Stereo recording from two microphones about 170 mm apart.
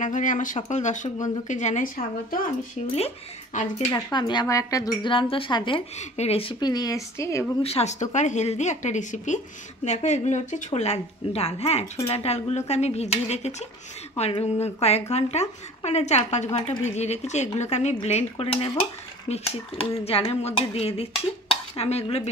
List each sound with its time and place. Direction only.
0.0 s a woman's voice: 50° left (ahead or behind)
3.9 s speech: 25° left (ahead or behind)
5.1 s speech: 30° left (ahead or behind)
5.9 s speech: 40° left (ahead or behind); by 7.4 s 15° left (ahead or behind)
7.6 s a woman's voice: 40° left (ahead or behind)